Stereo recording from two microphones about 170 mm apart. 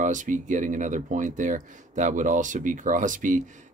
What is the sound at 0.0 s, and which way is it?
Speech, 50° right (ahead or behind).